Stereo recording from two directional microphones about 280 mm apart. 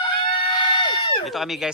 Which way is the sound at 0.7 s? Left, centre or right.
Centre.